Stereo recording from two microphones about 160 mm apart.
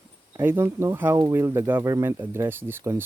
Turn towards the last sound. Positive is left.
turn(degrees=-15)  # may be behind; listen again after turning